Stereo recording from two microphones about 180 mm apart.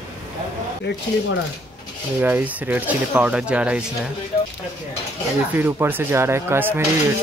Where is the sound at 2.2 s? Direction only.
10° right (ahead or behind).